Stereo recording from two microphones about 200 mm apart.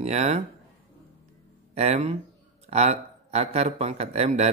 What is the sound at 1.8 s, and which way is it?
Speech, 30° right (ahead or behind).